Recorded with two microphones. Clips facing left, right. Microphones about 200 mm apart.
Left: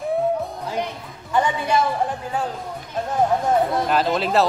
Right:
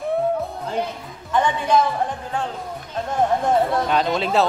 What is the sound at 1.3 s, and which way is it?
Speech, 10° left (ahead or behind).